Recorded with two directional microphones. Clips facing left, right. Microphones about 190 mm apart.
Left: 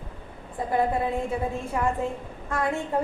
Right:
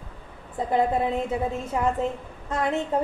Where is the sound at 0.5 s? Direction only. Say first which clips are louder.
Right 2 dB; 20° right (ahead or behind).